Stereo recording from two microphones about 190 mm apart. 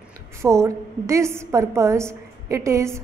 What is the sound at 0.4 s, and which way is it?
A woman's voice, 15° right (ahead or behind).